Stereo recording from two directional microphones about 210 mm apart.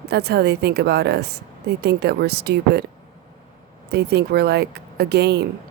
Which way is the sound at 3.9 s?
50° right (ahead or behind).